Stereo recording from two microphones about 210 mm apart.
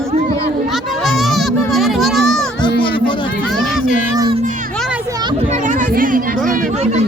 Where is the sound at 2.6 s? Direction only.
20° left (ahead or behind).